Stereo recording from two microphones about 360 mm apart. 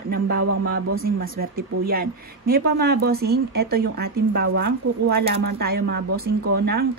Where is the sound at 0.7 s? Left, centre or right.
Right.